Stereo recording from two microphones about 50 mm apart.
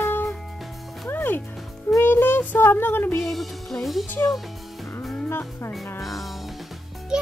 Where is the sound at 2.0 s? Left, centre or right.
Left.